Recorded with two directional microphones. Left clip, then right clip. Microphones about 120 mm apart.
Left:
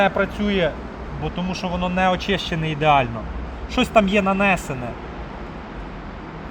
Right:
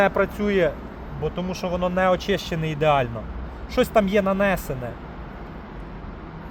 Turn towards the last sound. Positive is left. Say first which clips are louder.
# left 2 dB
turn(degrees=-60)  # may be behind; listen again after turning